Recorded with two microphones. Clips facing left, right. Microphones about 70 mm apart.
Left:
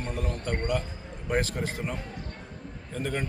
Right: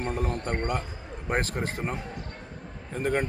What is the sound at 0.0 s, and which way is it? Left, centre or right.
A man's voice, right.